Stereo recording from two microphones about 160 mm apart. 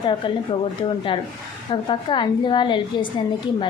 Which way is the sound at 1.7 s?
30° left (ahead or behind).